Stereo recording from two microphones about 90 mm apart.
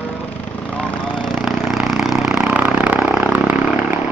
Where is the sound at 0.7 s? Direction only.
10° left (ahead or behind); by 3.0 s 15° right (ahead or behind).